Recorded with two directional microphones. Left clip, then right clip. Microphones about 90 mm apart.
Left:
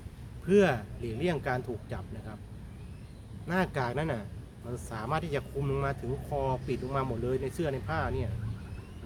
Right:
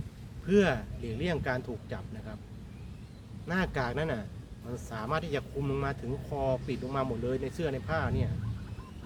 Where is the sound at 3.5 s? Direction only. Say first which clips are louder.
Left 1 dB; 35° left (ahead or behind).